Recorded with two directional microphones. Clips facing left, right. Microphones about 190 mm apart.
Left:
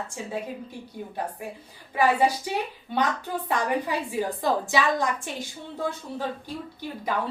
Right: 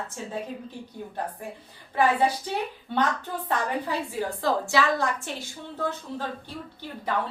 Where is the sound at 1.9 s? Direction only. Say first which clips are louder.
Left 1 dB; 10° left (ahead or behind).